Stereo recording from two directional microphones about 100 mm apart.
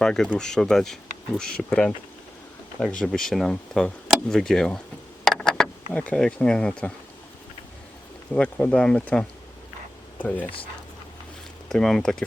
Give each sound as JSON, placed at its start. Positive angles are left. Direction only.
{"t": 0.0, "sound": "speech", "side_deg": 5}
{"t": 5.2, "sound": "insect", "side_deg": 5}
{"t": 8.3, "sound": "speech", "side_deg": 10}
{"t": 11.7, "sound": "speech", "side_deg": 5}